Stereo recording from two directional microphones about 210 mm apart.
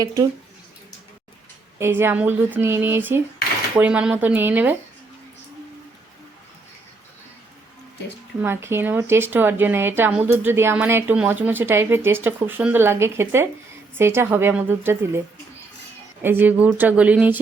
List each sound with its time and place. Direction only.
0.0 s a woman's voice: 15° right (ahead or behind)
1.8 s a woman's voice: 10° right (ahead or behind)
8.4 s a woman's voice: 10° right (ahead or behind)
16.2 s a woman's voice: 10° right (ahead or behind)